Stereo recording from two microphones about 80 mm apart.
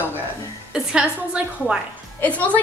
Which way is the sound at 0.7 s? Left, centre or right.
Centre.